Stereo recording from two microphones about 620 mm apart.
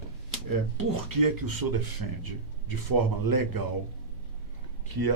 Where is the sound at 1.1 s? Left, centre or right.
Right.